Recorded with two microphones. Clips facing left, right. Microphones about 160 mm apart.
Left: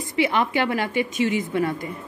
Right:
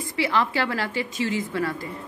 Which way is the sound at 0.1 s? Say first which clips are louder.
Left 3 dB; 20° left (ahead or behind).